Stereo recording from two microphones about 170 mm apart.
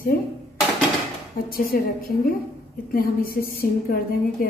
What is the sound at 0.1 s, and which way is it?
Speech, 60° left (ahead or behind).